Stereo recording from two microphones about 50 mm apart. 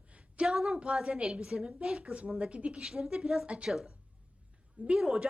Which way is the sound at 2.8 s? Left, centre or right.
Centre.